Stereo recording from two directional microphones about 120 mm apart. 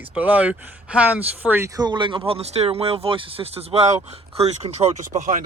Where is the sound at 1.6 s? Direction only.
35° right (ahead or behind); by 5.4 s 90° right.